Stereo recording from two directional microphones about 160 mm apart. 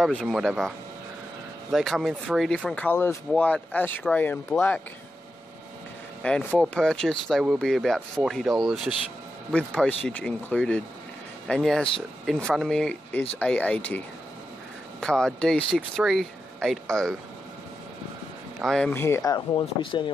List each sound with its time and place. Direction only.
0.0 s speech: 5° left (ahead or behind)
6.2 s speech: 5° left (ahead or behind)
18.6 s speech: 5° left (ahead or behind); by 20.1 s 30° left (ahead or behind)